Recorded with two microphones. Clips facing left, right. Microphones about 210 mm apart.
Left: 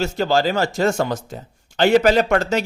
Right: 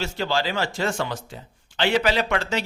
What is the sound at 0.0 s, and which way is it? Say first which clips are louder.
Speech: left 7 dB; 45° left (ahead or behind).